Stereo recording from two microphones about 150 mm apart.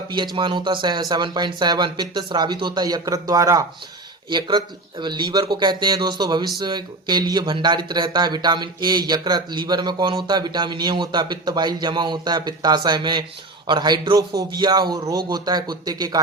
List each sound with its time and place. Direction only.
0.3 s speech: 35° right (ahead or behind)